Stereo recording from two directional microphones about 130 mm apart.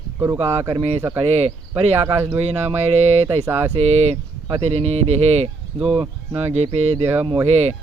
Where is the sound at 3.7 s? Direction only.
55° right (ahead or behind).